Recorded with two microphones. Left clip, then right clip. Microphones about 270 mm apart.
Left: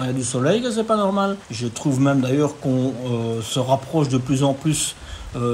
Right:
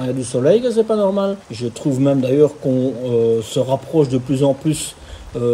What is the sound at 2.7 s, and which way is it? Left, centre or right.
Speech, centre.